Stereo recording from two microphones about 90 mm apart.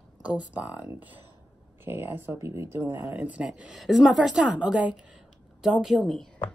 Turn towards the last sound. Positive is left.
turn(degrees=5)  # may be behind; listen again after turning